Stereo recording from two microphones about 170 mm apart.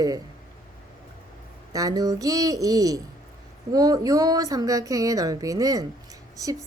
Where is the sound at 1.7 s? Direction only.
20° right (ahead or behind).